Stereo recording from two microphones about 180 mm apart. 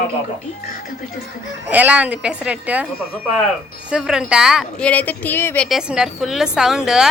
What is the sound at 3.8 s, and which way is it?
A woman's voice, 5° right (ahead or behind).